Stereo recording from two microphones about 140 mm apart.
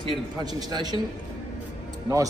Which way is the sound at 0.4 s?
30° right (ahead or behind).